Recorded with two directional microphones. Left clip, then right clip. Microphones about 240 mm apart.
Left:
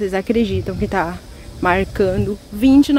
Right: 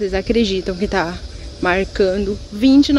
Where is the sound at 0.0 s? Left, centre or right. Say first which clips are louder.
Right 1 dB; centre.